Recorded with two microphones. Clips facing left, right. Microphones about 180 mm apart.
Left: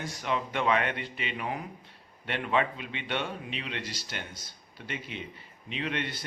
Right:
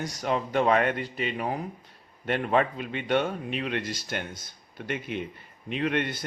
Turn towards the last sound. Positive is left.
turn(degrees=-50)  # may be behind; listen again after turning